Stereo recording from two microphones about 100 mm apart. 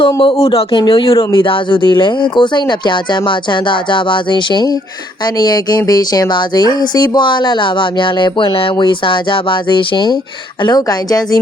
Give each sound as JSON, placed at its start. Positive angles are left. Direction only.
{"t": 0.2, "sound": "speech", "side_deg": 65}